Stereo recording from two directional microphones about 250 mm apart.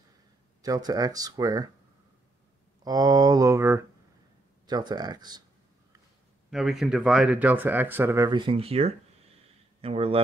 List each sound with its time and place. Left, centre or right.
0.6 s speech: centre
2.8 s speech: centre
6.5 s speech: centre; by 10.2 s right